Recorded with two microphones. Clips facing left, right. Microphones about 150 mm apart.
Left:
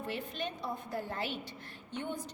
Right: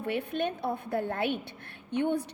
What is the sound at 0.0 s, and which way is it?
A woman's voice, 60° right (ahead or behind).